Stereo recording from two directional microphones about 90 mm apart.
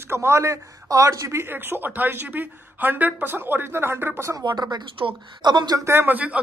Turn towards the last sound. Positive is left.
turn(degrees=-15)  # may be behind; listen again after turning